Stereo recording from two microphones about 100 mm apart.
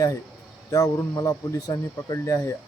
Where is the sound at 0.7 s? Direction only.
35° left (ahead or behind).